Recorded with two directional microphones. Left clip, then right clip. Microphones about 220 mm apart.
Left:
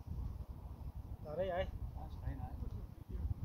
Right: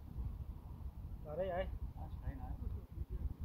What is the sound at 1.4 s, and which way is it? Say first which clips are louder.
Speech: left 1 dB; 10° left (ahead or behind).